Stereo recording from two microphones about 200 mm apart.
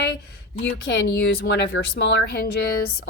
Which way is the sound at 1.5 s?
55° left (ahead or behind).